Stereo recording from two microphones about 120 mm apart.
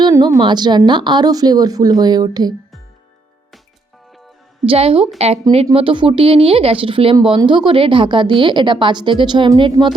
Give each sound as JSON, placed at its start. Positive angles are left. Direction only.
{"t": 0.2, "sound": "speech", "side_deg": -40}
{"t": 4.6, "sound": "speech", "side_deg": -50}
{"t": 5.7, "sound": "speech", "side_deg": -45}
{"t": 9.8, "sound": "speech", "side_deg": -25}